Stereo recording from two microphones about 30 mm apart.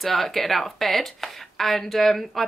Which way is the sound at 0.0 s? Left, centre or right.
Centre.